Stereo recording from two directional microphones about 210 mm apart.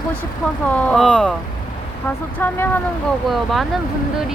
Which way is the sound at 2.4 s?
10° left (ahead or behind).